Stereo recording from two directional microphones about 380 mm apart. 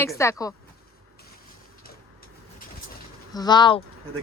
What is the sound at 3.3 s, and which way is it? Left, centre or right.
Speech, centre.